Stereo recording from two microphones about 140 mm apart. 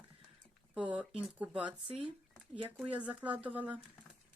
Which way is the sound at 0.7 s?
10° right (ahead or behind).